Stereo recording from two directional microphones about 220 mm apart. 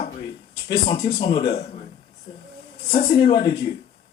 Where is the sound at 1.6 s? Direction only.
30° left (ahead or behind).